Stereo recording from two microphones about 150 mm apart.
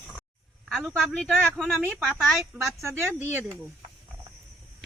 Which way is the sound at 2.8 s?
20° right (ahead or behind).